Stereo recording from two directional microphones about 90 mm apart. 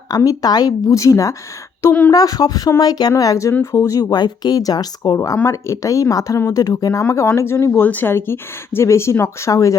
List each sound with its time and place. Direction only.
0.3 s speech: 45° left (ahead or behind)